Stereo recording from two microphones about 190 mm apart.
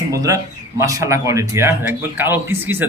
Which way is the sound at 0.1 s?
15° right (ahead or behind).